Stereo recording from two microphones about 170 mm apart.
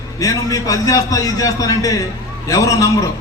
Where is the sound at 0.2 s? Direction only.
20° left (ahead or behind).